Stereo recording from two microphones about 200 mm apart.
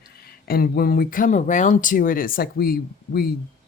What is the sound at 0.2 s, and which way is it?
Speech, 50° left (ahead or behind).